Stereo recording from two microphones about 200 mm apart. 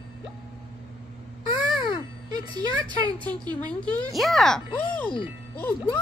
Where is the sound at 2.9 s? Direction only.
20° right (ahead or behind).